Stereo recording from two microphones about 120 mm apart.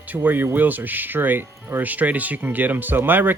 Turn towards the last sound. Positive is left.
turn(degrees=-15)  # may be behind; listen again after turning